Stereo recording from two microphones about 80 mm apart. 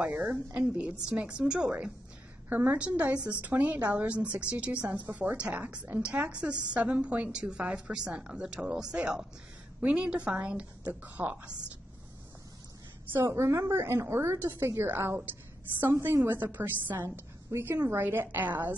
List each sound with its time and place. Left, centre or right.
0.0 s a woman's voice: right
13.1 s a woman's voice: right